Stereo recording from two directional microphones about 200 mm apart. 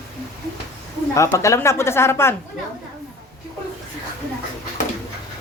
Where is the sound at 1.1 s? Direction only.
15° left (ahead or behind).